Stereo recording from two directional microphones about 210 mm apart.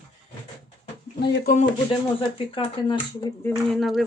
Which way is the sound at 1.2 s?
55° left (ahead or behind).